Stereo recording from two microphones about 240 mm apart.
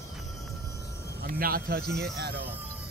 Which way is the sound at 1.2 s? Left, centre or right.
Right.